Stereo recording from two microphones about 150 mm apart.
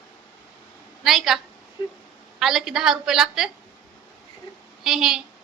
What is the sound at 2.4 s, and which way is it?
A woman's voice, centre (ahead or behind).